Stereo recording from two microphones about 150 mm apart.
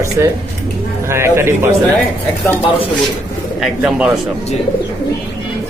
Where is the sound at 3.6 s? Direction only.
5° right (ahead or behind).